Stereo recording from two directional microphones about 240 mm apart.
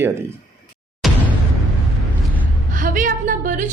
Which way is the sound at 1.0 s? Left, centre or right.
Centre.